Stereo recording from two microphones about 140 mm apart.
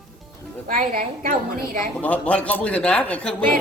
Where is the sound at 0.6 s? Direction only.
90° right.